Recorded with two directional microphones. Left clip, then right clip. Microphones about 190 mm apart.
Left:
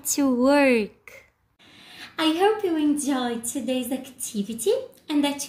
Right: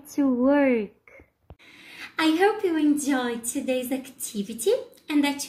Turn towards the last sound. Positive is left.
turn(degrees=10)  # may be behind; listen again after turning